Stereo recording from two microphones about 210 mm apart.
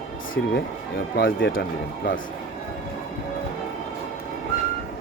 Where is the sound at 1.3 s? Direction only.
65° left (ahead or behind).